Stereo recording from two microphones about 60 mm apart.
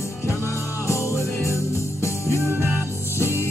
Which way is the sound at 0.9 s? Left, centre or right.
Left.